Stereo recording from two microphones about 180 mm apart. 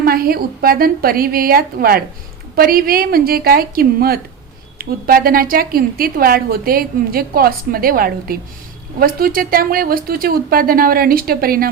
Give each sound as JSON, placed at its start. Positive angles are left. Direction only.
{"t": 0.0, "sound": "a woman's voice", "side_deg": -55}